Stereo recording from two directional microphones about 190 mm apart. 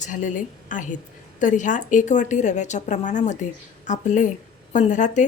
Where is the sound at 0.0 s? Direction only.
40° left (ahead or behind).